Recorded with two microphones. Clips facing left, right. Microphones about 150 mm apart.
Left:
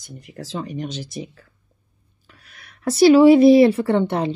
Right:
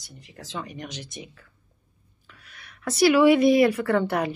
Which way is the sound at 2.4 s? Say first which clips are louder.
Left 7 dB; 40° left (ahead or behind).